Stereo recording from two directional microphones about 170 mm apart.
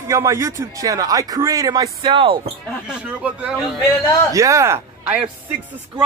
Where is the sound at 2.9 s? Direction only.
5° right (ahead or behind).